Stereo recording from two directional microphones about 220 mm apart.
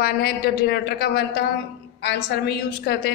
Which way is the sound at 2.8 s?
45° left (ahead or behind).